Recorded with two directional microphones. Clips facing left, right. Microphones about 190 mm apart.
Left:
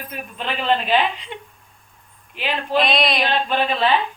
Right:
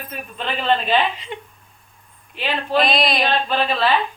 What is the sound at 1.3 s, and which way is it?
Speech, centre (ahead or behind).